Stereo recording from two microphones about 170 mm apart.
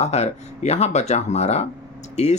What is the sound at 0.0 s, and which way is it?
Speech, 40° left (ahead or behind).